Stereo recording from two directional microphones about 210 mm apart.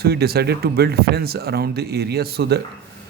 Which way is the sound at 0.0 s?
50° right (ahead or behind).